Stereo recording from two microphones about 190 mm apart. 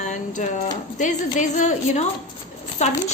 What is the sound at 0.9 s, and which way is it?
A woman's voice, 40° left (ahead or behind).